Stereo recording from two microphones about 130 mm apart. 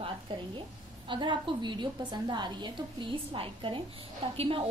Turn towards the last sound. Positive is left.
turn(degrees=-45)  # may be behind; listen again after turning